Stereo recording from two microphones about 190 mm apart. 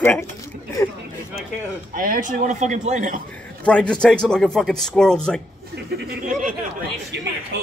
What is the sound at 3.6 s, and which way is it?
Speech, 5° left (ahead or behind).